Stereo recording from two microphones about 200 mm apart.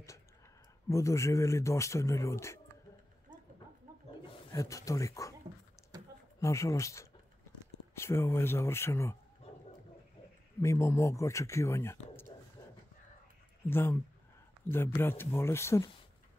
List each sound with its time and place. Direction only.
0.8 s a man's voice: 15° left (ahead or behind)
4.5 s a man's voice: 15° left (ahead or behind)
5.9 s a sound: 20° right (ahead or behind)
6.4 s a man's voice: 15° left (ahead or behind)
9.4 s dog: 30° left (ahead or behind)
10.6 s a man's voice: 15° left (ahead or behind)
13.7 s a man's voice: 10° left (ahead or behind)